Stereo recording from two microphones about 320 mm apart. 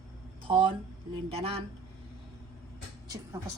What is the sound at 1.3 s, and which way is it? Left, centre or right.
Speech, centre.